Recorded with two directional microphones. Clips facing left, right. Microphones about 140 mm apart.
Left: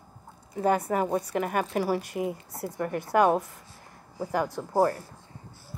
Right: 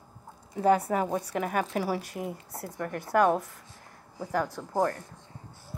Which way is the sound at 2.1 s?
5° left (ahead or behind).